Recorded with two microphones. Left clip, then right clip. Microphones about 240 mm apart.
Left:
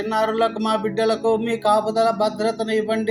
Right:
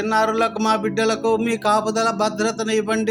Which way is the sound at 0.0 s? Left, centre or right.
Right.